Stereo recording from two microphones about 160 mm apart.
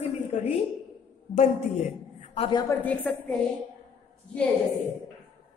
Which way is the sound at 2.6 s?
10° left (ahead or behind).